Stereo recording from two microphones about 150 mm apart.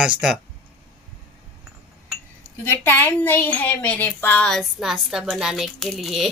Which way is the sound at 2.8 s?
15° left (ahead or behind).